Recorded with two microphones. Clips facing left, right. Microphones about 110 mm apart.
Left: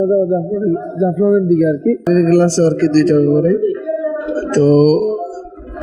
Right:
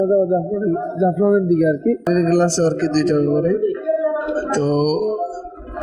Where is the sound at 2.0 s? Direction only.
10° right (ahead or behind).